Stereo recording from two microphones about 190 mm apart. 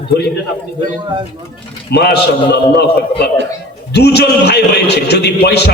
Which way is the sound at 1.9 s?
60° left (ahead or behind).